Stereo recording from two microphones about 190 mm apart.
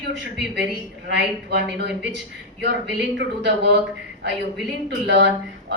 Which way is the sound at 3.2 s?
65° right (ahead or behind).